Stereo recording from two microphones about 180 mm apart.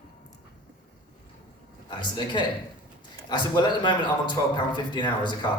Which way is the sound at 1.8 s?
25° left (ahead or behind).